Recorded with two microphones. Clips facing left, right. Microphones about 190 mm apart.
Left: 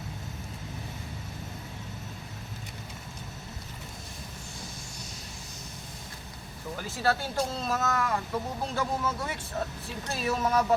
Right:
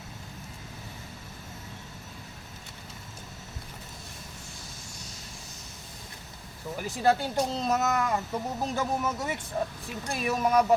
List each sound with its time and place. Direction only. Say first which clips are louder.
6.7 s speech: right 4 dB; 15° right (ahead or behind)